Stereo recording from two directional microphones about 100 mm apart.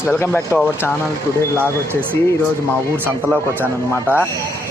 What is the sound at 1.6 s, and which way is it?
Speech, 20° right (ahead or behind).